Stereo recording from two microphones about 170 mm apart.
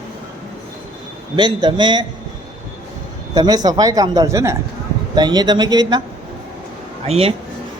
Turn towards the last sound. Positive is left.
turn(degrees=-35)  # may be behind; listen again after turning